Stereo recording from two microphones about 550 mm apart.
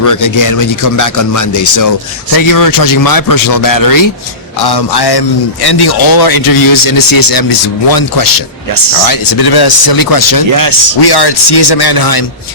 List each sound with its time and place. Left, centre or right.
0.0 s speech: left
10.5 s speech: right
11.0 s speech: left